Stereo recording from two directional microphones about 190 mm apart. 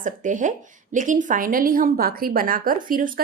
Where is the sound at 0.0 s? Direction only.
45° right (ahead or behind).